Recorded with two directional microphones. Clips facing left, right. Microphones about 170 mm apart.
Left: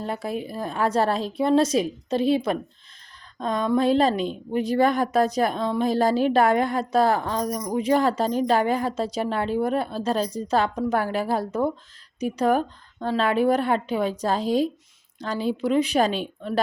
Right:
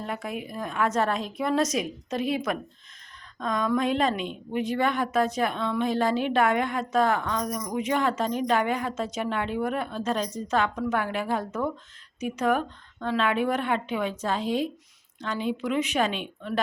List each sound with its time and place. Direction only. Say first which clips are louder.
0.0 s a woman's voice: left 4 dB; 30° left (ahead or behind)